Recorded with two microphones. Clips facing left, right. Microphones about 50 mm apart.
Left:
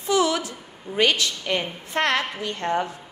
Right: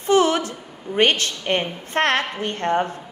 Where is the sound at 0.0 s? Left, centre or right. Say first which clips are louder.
Right 4 dB; right.